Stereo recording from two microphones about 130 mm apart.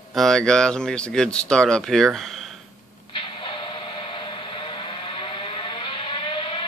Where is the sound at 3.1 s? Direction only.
45° left (ahead or behind).